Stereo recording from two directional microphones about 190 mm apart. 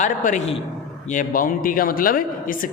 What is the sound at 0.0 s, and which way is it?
Speech, 40° left (ahead or behind).